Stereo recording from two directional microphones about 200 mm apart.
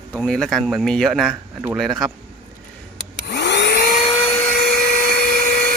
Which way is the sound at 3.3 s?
55° left (ahead or behind).